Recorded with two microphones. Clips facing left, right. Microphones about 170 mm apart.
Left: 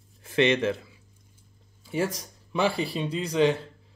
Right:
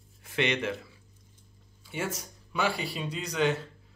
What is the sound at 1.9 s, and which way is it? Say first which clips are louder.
Speech: left 6 dB; 30° left (ahead or behind).